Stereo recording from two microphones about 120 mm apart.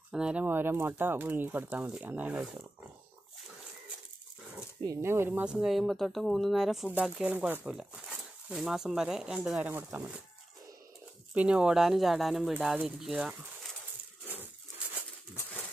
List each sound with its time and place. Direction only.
0.1 s speech: 10° right (ahead or behind)
4.8 s speech: 25° right (ahead or behind)
11.3 s speech: 10° right (ahead or behind)